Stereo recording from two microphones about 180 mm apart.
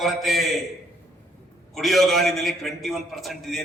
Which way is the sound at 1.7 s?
Centre (ahead or behind).